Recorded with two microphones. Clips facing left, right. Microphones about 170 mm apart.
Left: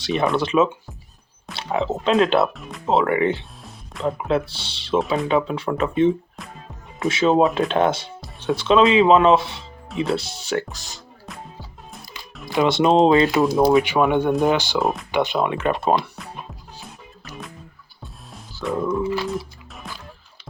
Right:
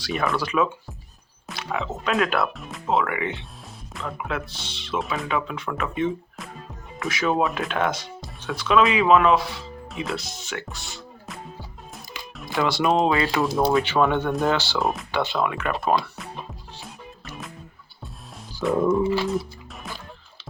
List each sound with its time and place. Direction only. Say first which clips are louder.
0.0 s speech: left 5 dB; 20° left (ahead or behind)
2.5 s speech: even; centre (ahead or behind)
2.8 s speech: left 6 dB; 30° left (ahead or behind)
11.3 s music: left 1 dB; centre (ahead or behind)
12.5 s speech: left 5 dB; 20° left (ahead or behind)
13.4 s speech: left 5 dB; centre (ahead or behind)
13.7 s speech: left 3 dB; 15° left (ahead or behind)
14.8 s speech: left 3 dB; centre (ahead or behind)
15.1 s speech: left 4 dB; 15° left (ahead or behind)
17.2 s music: left 2 dB; centre (ahead or behind)
18.9 s dog: right 1 dB; 25° right (ahead or behind)
19.9 s music: even; centre (ahead or behind)